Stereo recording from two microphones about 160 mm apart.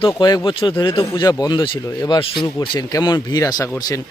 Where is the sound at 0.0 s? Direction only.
25° left (ahead or behind).